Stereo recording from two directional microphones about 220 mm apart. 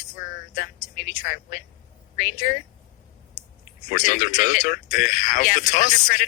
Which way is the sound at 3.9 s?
35° left (ahead or behind).